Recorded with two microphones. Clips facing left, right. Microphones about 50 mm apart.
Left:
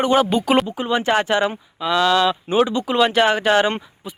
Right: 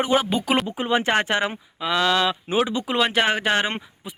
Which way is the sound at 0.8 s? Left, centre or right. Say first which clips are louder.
Left 2 dB; right.